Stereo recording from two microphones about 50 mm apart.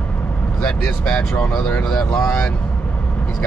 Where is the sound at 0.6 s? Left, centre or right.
Left.